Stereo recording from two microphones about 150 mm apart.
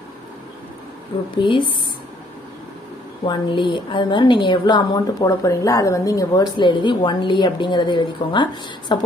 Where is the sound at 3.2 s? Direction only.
30° left (ahead or behind).